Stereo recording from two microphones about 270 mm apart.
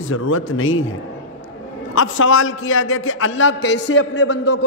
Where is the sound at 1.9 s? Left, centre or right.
Left.